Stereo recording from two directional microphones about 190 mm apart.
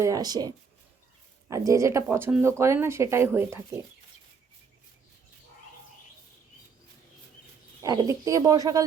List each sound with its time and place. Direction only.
0.0 s speech: 20° right (ahead or behind)
7.8 s speech: 20° right (ahead or behind)